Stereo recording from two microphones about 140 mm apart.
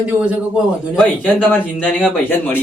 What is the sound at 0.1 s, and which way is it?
Speech, 10° right (ahead or behind).